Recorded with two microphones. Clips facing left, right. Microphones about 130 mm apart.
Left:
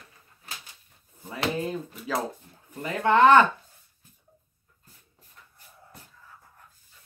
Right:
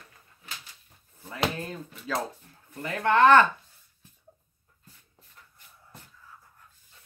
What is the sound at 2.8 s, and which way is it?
Speech, 15° left (ahead or behind).